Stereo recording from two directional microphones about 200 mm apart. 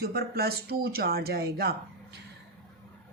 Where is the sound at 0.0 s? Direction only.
50° right (ahead or behind).